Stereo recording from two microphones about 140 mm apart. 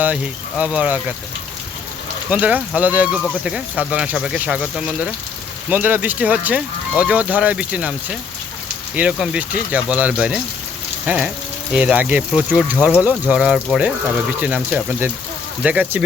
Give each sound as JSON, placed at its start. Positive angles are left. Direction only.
{"t": 0.0, "sound": "speech", "side_deg": -10}
{"t": 2.3, "sound": "speech", "side_deg": -10}
{"t": 9.0, "sound": "speech", "side_deg": -5}
{"t": 11.0, "sound": "a sound", "side_deg": -10}
{"t": 11.7, "sound": "speech", "side_deg": -10}